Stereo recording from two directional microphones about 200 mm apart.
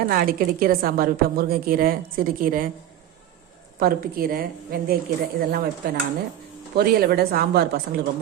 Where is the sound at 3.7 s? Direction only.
45° right (ahead or behind).